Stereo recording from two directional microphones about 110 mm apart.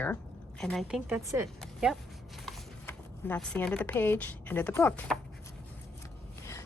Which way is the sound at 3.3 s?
10° left (ahead or behind).